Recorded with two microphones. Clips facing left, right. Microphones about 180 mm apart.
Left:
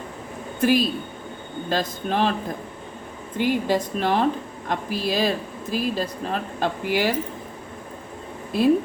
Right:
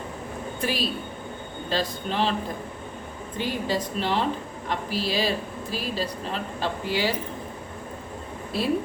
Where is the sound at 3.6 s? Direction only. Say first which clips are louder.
Left 4 dB; 50° left (ahead or behind).